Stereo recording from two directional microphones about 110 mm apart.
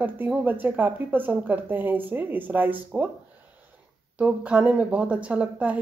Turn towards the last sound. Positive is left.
turn(degrees=-15)  # may be behind; listen again after turning